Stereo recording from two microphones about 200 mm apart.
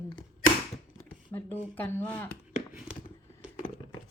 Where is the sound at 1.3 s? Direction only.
10° left (ahead or behind).